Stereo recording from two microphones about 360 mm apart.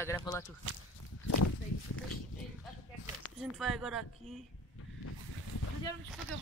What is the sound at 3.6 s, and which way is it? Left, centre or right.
Speech, centre.